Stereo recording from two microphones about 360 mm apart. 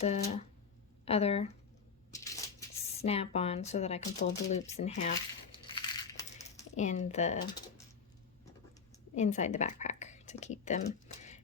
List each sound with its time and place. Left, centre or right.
0.0 s speech: centre
5.8 s coin: centre
9.1 s a woman's voice: centre